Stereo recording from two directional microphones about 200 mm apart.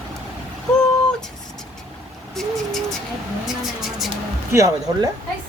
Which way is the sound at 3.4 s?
Centre (ahead or behind).